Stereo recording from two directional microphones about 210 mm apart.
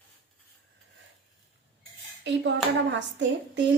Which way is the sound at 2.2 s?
55° right (ahead or behind).